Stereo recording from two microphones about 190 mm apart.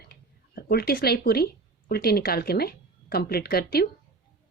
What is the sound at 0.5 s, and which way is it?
Speech, 55° left (ahead or behind).